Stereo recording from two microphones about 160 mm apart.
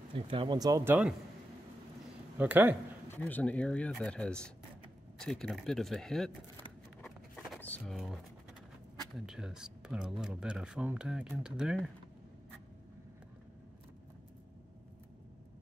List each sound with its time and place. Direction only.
0.1 s speech: 30° right (ahead or behind)
2.3 s speech: 10° right (ahead or behind)
3.1 s speech: 10° left (ahead or behind)
7.1 s a sound: centre (ahead or behind)
7.8 s speech: centre (ahead or behind)